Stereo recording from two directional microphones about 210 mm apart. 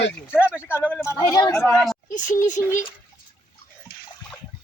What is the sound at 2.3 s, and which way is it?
Speech, 35° left (ahead or behind).